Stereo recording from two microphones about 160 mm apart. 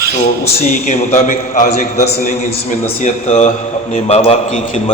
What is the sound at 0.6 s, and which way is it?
A man's voice, 50° left (ahead or behind).